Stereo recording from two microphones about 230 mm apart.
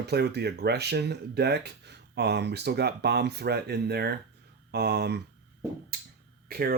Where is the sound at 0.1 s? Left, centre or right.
Right.